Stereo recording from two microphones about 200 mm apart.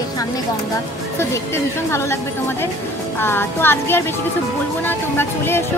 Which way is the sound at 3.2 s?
10° left (ahead or behind).